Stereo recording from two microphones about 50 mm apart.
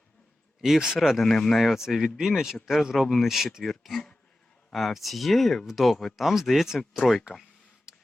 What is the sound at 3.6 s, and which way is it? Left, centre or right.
Speech, centre.